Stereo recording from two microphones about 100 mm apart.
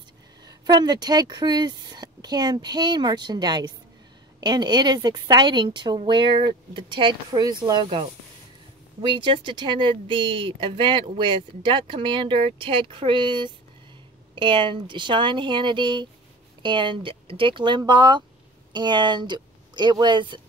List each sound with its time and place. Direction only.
0.5 s a woman's voice: 40° right (ahead or behind)
9.0 s a woman's voice: 50° right (ahead or behind)